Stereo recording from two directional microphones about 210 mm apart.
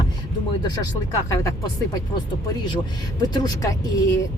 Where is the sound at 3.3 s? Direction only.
20° left (ahead or behind).